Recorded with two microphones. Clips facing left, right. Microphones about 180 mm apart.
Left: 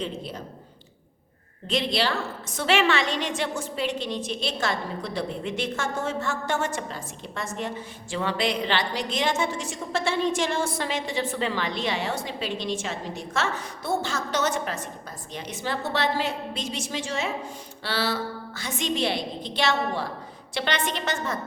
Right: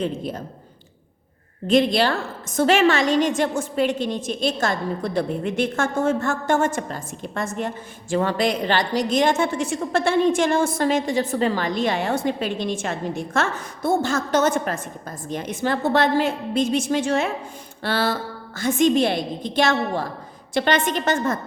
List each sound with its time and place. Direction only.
0.0 s a woman's voice: 50° right (ahead or behind)
1.6 s a woman's voice: 50° right (ahead or behind)